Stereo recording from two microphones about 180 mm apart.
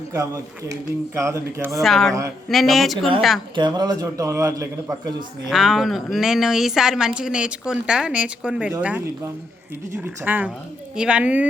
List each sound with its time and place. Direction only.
0.7 s speech: 15° right (ahead or behind)
1.8 s speech: centre (ahead or behind)
3.5 s a man's voice: 25° right (ahead or behind)
5.5 s speech: centre (ahead or behind)